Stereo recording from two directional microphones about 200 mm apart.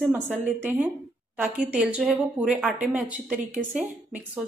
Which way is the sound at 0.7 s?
10° right (ahead or behind).